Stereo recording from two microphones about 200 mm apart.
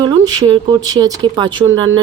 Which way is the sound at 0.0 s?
25° right (ahead or behind).